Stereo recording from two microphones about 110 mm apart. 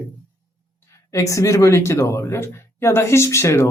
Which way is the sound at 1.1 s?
30° left (ahead or behind).